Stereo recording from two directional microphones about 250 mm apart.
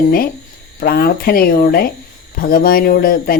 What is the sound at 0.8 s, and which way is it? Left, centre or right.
Speech, left.